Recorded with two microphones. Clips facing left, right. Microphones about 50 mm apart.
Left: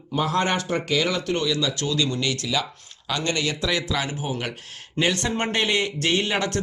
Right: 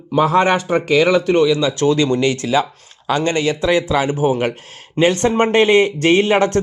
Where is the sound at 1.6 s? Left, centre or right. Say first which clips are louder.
Right 9 dB; right.